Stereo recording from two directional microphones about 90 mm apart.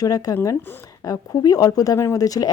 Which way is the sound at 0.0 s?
40° left (ahead or behind).